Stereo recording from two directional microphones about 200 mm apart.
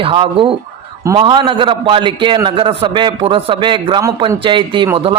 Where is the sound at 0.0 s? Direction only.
25° right (ahead or behind).